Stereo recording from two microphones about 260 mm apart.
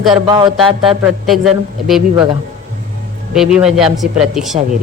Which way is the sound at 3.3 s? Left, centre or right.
Centre.